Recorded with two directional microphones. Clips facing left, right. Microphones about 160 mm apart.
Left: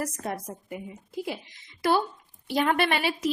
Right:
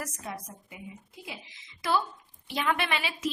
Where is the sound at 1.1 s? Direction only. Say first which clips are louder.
Left 14 dB; 65° left (ahead or behind).